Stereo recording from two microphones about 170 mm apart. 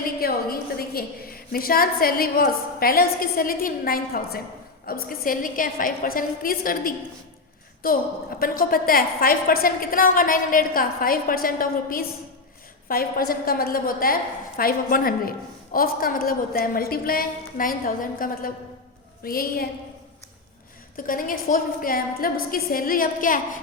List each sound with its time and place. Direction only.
0.2 s a woman's voice: 65° left (ahead or behind)
20.9 s a woman's voice: 55° left (ahead or behind)